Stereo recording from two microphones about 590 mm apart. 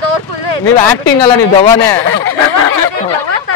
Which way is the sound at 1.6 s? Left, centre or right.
Centre.